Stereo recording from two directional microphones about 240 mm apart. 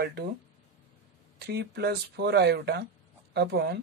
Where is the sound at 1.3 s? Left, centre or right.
Right.